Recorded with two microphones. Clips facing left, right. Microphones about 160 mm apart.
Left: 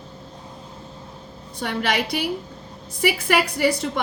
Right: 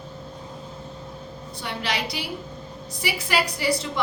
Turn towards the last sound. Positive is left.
turn(degrees=60)  # may be behind; listen again after turning